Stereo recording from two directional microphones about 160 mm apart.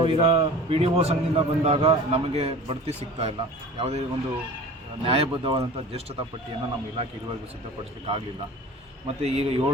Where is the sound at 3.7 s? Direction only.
40° right (ahead or behind).